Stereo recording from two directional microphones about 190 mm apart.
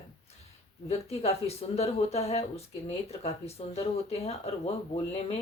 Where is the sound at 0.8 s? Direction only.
35° left (ahead or behind).